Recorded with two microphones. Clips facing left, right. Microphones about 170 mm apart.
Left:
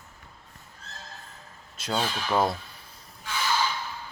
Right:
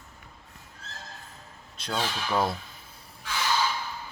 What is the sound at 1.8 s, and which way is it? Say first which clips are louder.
Speech: left 2 dB; 5° left (ahead or behind).